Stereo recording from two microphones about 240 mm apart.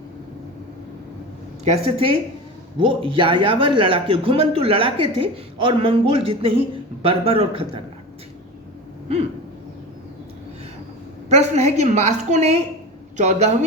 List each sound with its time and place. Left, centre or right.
1.6 s speech: right
11.3 s speech: right